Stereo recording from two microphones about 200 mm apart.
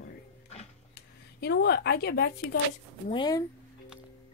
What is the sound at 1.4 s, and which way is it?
Speech, 55° left (ahead or behind).